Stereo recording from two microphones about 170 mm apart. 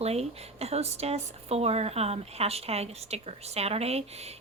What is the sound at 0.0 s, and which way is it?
Speech, 40° right (ahead or behind).